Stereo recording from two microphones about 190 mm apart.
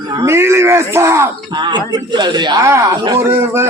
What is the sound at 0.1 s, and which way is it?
A man's voice, 20° right (ahead or behind).